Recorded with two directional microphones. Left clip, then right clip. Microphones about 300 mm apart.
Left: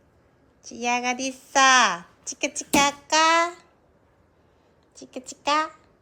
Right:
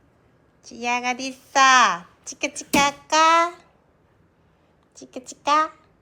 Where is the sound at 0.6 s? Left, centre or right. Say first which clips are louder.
Right 1 dB; centre.